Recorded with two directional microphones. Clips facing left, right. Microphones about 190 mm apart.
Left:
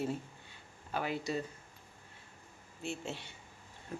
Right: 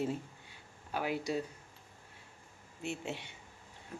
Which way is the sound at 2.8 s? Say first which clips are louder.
Right 1 dB; 20° right (ahead or behind).